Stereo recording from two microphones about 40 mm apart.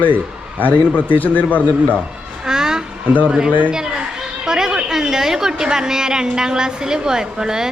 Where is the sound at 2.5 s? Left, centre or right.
Centre.